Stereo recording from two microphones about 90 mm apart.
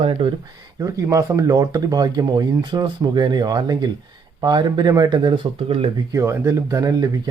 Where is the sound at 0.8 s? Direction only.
40° right (ahead or behind); by 5.9 s 90° right.